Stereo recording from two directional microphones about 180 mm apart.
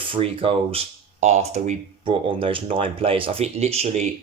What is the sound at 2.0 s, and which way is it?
Speech, 30° right (ahead or behind).